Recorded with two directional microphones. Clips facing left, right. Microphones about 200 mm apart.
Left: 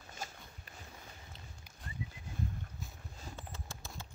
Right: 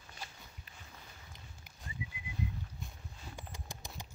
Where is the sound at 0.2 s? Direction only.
45° left (ahead or behind).